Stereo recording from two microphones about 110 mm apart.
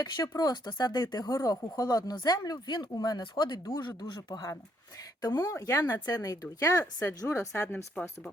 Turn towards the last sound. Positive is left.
turn(degrees=25)  # may be behind; listen again after turning